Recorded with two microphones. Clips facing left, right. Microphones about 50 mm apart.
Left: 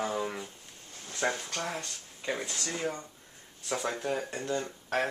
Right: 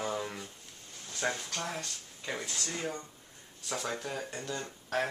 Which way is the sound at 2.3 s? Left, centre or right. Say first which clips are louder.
Left 2 dB; centre.